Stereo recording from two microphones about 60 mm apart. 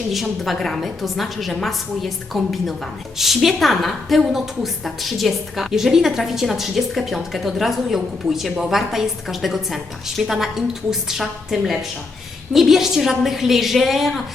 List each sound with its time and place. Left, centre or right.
0.1 s a woman's voice: centre